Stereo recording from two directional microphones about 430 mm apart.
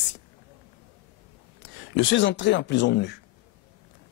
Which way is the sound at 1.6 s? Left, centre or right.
Left.